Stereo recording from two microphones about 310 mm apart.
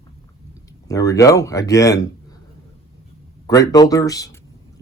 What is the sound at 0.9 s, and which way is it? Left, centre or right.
Speech, centre.